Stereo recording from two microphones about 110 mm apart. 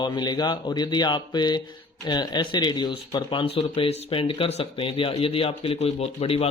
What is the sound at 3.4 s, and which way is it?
Speech, 60° left (ahead or behind).